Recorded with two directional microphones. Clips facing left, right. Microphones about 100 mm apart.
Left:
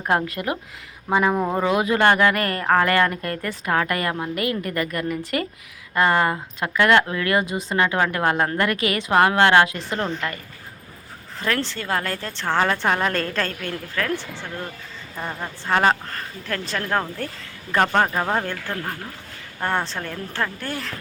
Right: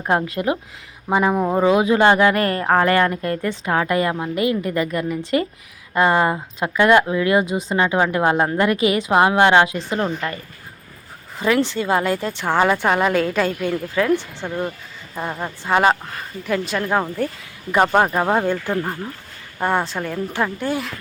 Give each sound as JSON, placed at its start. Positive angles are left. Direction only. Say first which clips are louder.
{"t": 0.3, "sound": "a woman's voice", "louder": "right 5 dB", "side_deg": -25}
{"t": 1.1, "sound": "speech", "louder": "right 2 dB", "side_deg": -10}
{"t": 1.6, "sound": "a woman's voice", "louder": "right 4 dB", "side_deg": -20}
{"t": 2.3, "sound": "a woman's voice", "louder": "right 2 dB", "side_deg": -30}
{"t": 11.3, "sound": "speech", "louder": "right 7 dB", "side_deg": -15}